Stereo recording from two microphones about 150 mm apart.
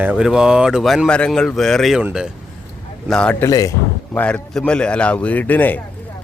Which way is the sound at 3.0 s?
5° left (ahead or behind).